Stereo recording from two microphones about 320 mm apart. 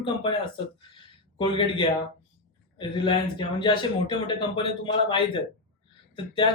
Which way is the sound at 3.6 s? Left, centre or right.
Centre.